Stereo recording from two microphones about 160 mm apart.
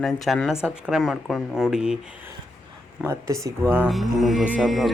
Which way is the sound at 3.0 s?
20° right (ahead or behind).